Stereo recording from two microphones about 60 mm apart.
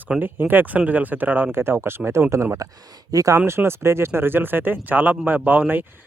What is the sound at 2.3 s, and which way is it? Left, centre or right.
Speech, right.